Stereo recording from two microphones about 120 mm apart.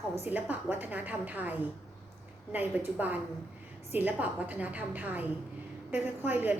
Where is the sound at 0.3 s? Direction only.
15° right (ahead or behind).